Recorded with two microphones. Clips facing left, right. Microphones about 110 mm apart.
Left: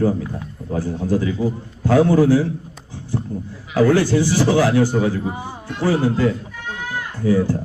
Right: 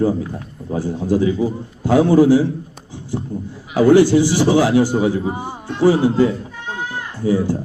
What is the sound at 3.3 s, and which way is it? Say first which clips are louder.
Speech: right 1 dB; 30° right (ahead or behind).